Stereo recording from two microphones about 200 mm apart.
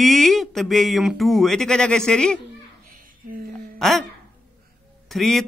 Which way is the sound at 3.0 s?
45° right (ahead or behind).